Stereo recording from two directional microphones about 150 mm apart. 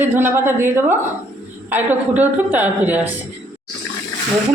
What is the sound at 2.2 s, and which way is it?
Speech, 10° right (ahead or behind).